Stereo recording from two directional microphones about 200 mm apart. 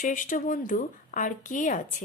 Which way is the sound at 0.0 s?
40° left (ahead or behind).